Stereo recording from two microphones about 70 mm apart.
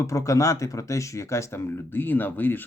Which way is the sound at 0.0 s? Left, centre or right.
Left.